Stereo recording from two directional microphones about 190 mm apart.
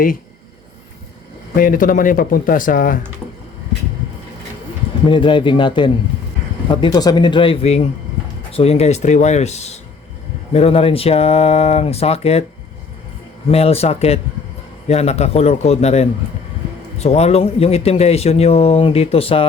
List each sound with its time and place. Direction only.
1.5 s speech: 45° left (ahead or behind)
5.0 s a man's voice: 25° left (ahead or behind)
13.5 s a man's voice: 30° left (ahead or behind)